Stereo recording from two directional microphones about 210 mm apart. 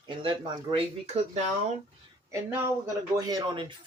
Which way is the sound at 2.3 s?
15° right (ahead or behind).